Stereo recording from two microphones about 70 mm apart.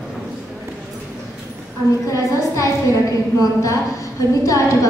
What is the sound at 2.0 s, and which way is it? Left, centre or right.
A woman's voice, left.